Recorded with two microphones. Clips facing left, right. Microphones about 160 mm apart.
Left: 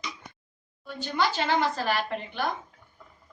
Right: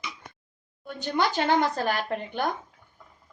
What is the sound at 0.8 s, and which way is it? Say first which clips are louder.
Speech: right 1 dB; 45° right (ahead or behind).